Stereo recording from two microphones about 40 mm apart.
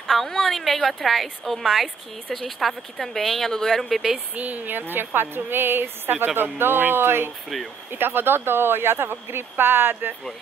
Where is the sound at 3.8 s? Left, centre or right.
Centre.